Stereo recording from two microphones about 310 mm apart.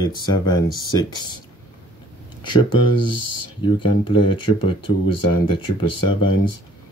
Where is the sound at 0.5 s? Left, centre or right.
Centre.